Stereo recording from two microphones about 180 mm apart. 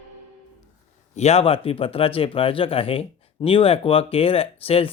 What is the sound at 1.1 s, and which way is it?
Speech, 35° left (ahead or behind).